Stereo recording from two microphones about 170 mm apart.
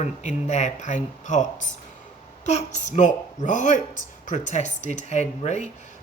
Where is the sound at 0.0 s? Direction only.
45° left (ahead or behind).